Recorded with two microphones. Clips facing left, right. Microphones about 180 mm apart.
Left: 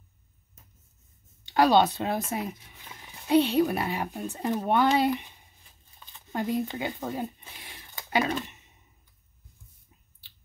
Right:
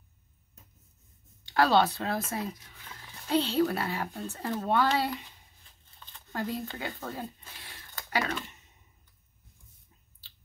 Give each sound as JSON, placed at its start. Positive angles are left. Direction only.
{"t": 1.4, "sound": "speech", "side_deg": 20}